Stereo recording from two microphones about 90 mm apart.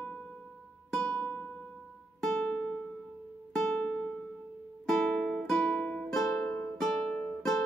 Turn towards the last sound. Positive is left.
turn(degrees=5)  # may be behind; listen again after turning